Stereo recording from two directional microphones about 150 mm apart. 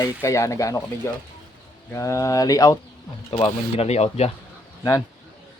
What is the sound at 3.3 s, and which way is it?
Speech, 35° left (ahead or behind).